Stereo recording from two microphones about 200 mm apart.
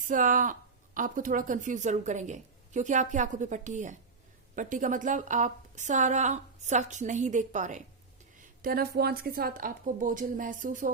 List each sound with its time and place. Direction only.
0.0 s a woman's voice: 40° right (ahead or behind)